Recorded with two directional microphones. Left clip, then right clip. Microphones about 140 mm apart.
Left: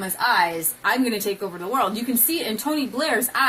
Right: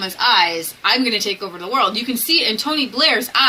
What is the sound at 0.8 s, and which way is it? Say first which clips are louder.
A woman's voice: right 5 dB; 20° left (ahead or behind).